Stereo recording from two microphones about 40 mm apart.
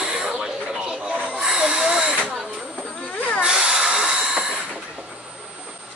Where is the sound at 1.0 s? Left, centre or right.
Right.